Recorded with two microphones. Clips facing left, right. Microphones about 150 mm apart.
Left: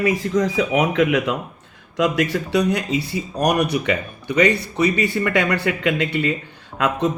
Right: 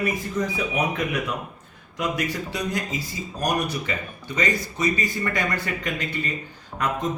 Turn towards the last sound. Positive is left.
turn(degrees=85)